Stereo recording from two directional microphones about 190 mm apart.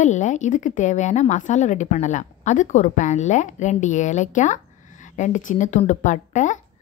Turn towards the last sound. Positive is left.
turn(degrees=40)  # may be behind; listen again after turning